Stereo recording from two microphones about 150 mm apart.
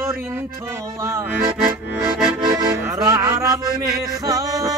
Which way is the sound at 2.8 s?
20° right (ahead or behind).